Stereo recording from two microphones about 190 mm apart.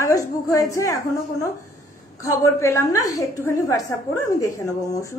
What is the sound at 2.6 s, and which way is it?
A woman's voice, 15° left (ahead or behind).